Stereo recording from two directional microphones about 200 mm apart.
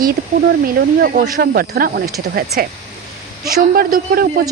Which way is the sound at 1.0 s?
50° right (ahead or behind).